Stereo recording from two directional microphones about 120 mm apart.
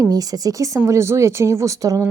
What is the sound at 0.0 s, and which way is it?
A woman's voice, 30° right (ahead or behind).